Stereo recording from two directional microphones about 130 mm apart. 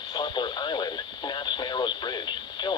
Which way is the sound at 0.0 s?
35° left (ahead or behind).